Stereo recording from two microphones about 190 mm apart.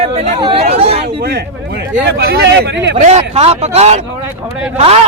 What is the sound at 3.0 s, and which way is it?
A man's voice, 35° right (ahead or behind).